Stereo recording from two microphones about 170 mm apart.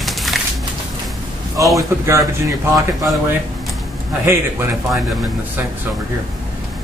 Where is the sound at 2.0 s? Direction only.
20° right (ahead or behind).